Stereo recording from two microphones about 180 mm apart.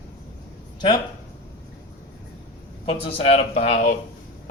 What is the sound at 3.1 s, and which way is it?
Speech, 35° left (ahead or behind).